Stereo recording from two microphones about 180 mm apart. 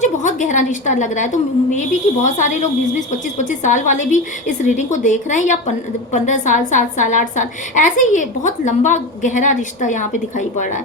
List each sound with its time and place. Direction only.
0.0 s a woman's voice: 45° left (ahead or behind)